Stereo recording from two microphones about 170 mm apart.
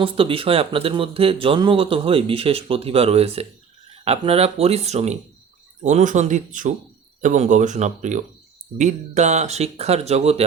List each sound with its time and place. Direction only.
0.0 s speech: 30° right (ahead or behind)